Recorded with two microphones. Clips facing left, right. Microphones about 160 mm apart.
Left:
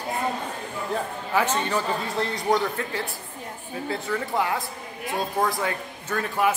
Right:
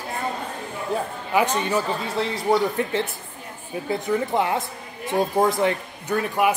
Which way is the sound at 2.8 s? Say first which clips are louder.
Right 6 dB; 20° right (ahead or behind).